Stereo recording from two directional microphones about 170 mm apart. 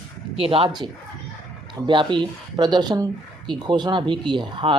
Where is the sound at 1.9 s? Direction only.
30° right (ahead or behind).